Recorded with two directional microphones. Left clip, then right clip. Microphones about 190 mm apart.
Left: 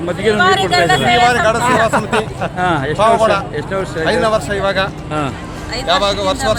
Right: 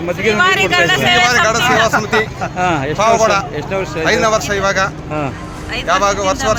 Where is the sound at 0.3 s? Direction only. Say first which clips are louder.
Even; 25° right (ahead or behind).